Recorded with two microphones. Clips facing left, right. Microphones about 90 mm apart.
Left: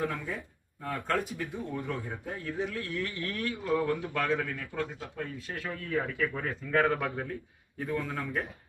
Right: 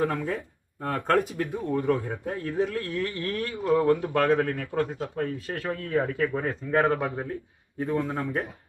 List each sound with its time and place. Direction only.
0.0 s speech: 55° right (ahead or behind); by 8.3 s 25° right (ahead or behind)